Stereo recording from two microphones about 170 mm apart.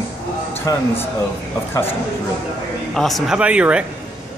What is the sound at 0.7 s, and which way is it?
Speech, 20° left (ahead or behind).